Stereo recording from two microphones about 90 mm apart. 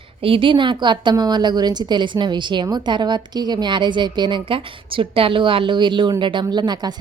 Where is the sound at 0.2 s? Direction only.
85° right; by 1.1 s 60° right (ahead or behind).